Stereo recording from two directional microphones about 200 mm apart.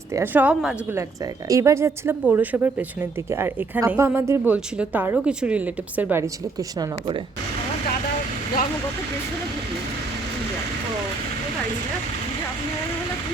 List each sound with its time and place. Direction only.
0.1 s a woman's voice: 10° right (ahead or behind)